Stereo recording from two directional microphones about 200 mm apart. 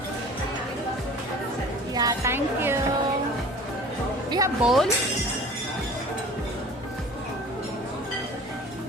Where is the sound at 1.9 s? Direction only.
15° right (ahead or behind).